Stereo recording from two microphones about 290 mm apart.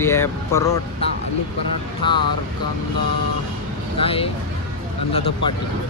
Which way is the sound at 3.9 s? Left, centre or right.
Centre.